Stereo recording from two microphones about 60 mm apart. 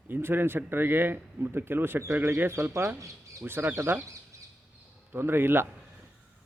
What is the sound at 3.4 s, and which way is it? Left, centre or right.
Speech, right.